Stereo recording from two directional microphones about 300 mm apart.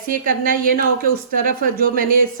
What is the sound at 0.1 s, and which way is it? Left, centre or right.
A woman's voice, right.